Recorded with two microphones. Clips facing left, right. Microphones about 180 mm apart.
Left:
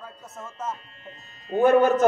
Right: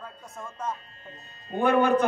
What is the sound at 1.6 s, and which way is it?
Speech, 45° left (ahead or behind).